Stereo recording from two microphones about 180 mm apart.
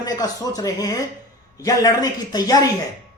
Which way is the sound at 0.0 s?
20° left (ahead or behind).